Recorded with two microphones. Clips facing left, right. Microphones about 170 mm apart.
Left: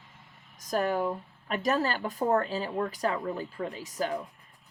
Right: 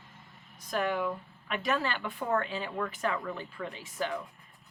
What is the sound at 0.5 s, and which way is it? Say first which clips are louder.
Speech: left 3 dB; 40° left (ahead or behind).